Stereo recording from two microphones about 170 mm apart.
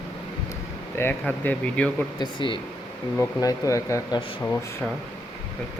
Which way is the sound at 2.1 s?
25° left (ahead or behind).